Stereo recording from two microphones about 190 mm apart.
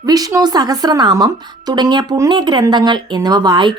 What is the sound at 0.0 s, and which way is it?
Speech, 20° right (ahead or behind).